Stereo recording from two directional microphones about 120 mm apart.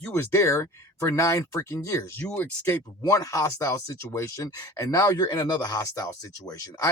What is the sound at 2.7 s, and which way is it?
Speech, 30° left (ahead or behind).